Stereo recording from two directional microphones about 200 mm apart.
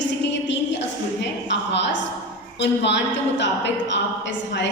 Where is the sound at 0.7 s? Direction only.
60° left (ahead or behind).